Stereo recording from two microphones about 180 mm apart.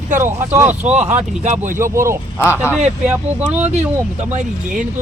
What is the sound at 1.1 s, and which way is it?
Speech, 40° right (ahead or behind).